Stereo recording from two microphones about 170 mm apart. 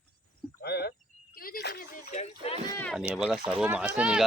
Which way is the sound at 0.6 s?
70° left (ahead or behind).